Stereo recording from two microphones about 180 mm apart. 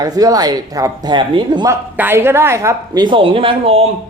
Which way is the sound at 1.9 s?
10° right (ahead or behind).